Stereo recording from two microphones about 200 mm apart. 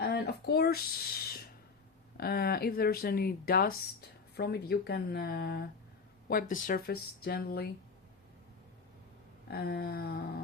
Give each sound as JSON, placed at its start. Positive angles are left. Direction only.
{"t": 0.0, "sound": "a sound", "side_deg": 55}
{"t": 2.1, "sound": "speech", "side_deg": 50}
{"t": 9.5, "sound": "speech", "side_deg": 50}